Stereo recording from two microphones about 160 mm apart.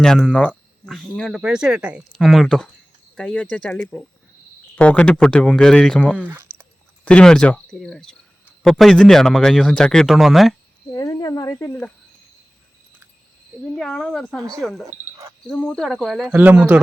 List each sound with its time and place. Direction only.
0.0 s a man's voice: 5° left (ahead or behind)
6.1 s a sound: 10° right (ahead or behind)
7.0 s a man's voice: 5° left (ahead or behind)
10.9 s cricket: 25° left (ahead or behind)
13.7 s a man's voice: centre (ahead or behind)